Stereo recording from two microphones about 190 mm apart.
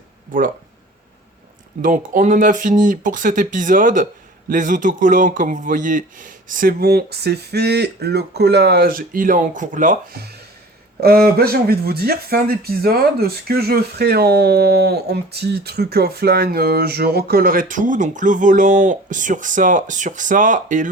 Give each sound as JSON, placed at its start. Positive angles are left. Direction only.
{"t": 0.3, "sound": "speech", "side_deg": -45}
{"t": 1.8, "sound": "speech", "side_deg": -45}